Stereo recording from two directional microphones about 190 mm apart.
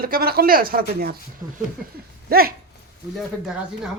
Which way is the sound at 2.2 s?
50° right (ahead or behind).